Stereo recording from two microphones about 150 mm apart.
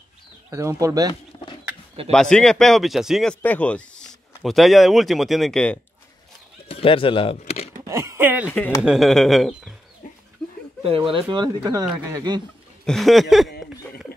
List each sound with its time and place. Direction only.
0.5 s speech: 20° right (ahead or behind)
2.1 s speech: 5° left (ahead or behind)
3.4 s speech: 10° left (ahead or behind)
6.7 s speech: 35° left (ahead or behind)
7.8 s a sound: 20° right (ahead or behind)
8.5 s speech: 10° left (ahead or behind)
8.8 s speech: centre (ahead or behind)
10.0 s dog: 60° left (ahead or behind)
10.8 s speech: 40° right (ahead or behind)
12.8 s speech: centre (ahead or behind)